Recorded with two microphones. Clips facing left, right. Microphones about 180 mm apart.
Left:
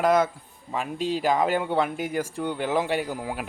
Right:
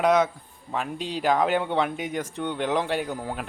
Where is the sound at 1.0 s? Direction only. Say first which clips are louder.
Left 5 dB; 45° left (ahead or behind).